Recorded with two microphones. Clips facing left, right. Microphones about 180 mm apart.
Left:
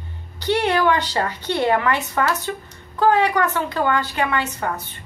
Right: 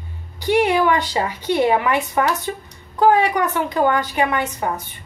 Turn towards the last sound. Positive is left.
turn(degrees=-15)  # may be behind; listen again after turning